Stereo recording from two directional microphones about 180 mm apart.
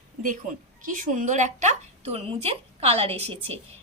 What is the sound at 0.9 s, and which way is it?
A woman's voice, 45° right (ahead or behind).